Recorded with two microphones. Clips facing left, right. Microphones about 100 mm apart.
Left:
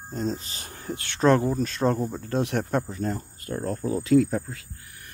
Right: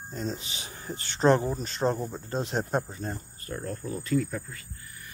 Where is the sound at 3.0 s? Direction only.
80° left.